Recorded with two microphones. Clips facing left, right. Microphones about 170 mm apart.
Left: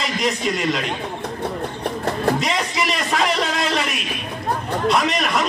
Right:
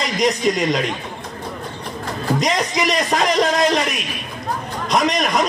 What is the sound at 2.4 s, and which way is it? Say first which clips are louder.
A man's voice: right 3 dB; 40° right (ahead or behind).